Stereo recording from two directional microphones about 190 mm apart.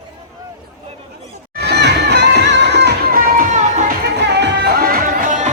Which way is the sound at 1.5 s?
60° right (ahead or behind).